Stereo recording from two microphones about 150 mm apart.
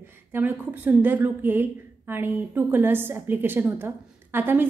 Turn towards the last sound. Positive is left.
turn(degrees=-15)  # may be behind; listen again after turning